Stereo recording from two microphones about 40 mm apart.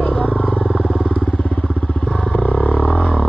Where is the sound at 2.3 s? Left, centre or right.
Left.